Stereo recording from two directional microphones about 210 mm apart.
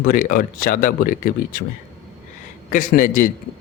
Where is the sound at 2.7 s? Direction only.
40° left (ahead or behind).